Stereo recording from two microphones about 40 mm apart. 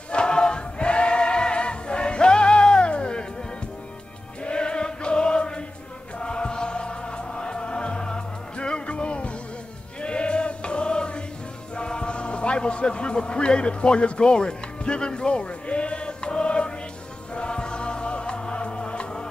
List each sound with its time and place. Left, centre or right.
0.1 s choir: left
4.5 s music: left